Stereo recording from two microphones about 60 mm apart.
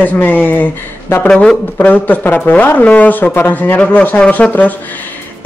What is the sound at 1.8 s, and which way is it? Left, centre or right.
A woman's voice, left.